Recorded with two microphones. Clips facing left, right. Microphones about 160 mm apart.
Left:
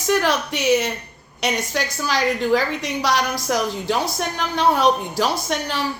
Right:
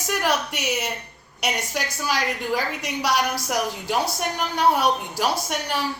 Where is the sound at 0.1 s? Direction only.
10° right (ahead or behind).